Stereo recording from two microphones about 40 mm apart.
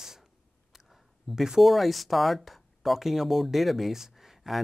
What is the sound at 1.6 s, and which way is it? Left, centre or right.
Speech, centre.